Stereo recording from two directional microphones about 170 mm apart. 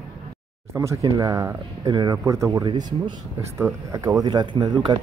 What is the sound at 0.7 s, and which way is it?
Speech, 15° right (ahead or behind).